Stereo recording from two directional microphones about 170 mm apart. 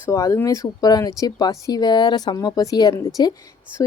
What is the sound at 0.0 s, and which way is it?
A woman's voice, 15° left (ahead or behind).